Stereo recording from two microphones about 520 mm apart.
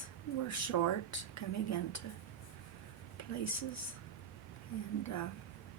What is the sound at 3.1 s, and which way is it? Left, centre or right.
Speech, left.